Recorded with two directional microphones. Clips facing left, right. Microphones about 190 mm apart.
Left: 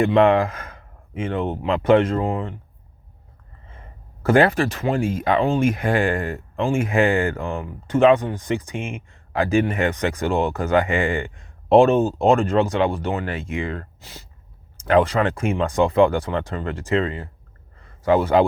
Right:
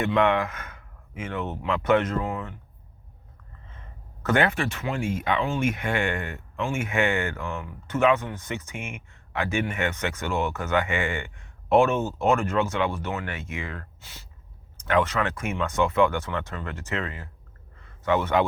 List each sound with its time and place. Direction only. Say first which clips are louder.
0.0 s speech: left 7 dB; 30° left (ahead or behind)
3.7 s speech: left 4 dB; 30° left (ahead or behind)